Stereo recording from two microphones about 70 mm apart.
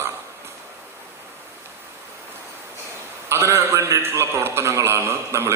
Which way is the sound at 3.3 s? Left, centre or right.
Right.